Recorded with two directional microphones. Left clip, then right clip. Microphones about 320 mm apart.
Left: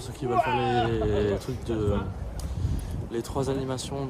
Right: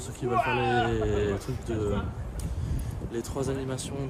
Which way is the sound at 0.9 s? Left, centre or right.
Centre.